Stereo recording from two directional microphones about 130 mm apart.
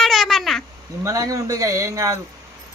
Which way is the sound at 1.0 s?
25° right (ahead or behind).